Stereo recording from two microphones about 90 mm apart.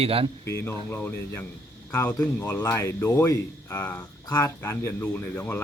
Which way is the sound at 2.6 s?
35° left (ahead or behind).